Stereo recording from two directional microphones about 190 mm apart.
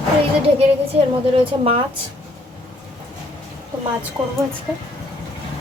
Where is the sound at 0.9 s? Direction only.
35° right (ahead or behind).